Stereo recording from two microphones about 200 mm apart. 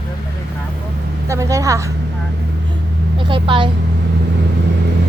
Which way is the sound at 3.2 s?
25° right (ahead or behind).